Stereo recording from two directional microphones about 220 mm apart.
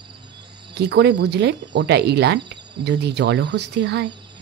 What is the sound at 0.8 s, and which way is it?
Speech, 50° right (ahead or behind).